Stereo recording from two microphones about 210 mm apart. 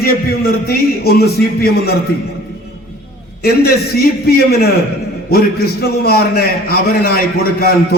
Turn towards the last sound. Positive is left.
turn(degrees=45)  # may be behind; listen again after turning